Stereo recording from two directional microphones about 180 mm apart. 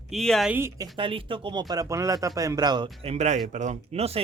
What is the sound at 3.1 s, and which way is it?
Speech, 40° right (ahead or behind).